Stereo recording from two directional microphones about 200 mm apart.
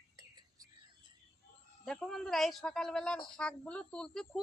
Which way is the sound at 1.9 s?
5° left (ahead or behind).